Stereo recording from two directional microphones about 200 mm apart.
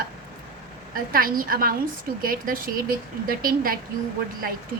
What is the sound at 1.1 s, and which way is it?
A woman's voice, 45° right (ahead or behind).